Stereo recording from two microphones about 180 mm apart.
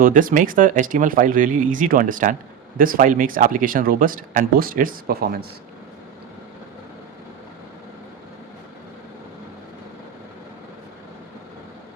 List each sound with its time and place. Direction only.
0.0 s speech: 50° right (ahead or behind)